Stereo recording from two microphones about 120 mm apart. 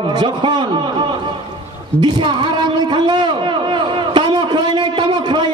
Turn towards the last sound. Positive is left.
turn(degrees=-40)  # may be behind; listen again after turning